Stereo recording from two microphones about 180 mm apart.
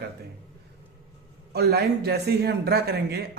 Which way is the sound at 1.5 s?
60° right (ahead or behind).